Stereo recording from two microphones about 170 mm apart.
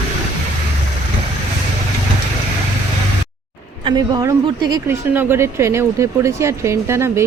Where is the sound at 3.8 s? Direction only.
25° right (ahead or behind).